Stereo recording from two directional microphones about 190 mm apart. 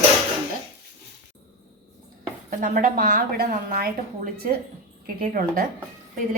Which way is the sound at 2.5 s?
45° right (ahead or behind).